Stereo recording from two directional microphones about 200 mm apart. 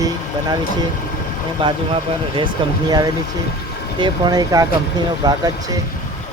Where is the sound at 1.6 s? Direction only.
25° right (ahead or behind).